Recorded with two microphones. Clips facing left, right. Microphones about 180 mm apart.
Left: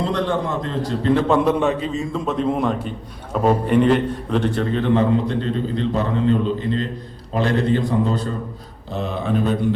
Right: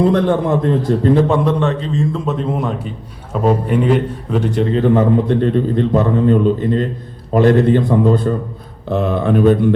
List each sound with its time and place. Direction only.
0.0 s a man's voice: 50° right (ahead or behind)
1.3 s a man's voice: 5° left (ahead or behind)
4.8 s a man's voice: 50° right (ahead or behind)